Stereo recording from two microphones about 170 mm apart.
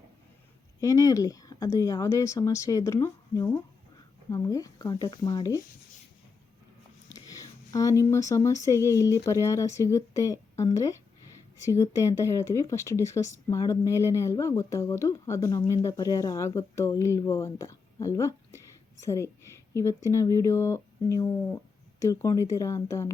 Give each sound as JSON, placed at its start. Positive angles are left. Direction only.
{"t": 0.8, "sound": "speech", "side_deg": 20}
{"t": 7.1, "sound": "speech", "side_deg": 20}